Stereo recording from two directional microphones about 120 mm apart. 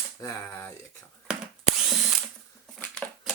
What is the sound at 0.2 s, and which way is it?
Speech, 30° left (ahead or behind).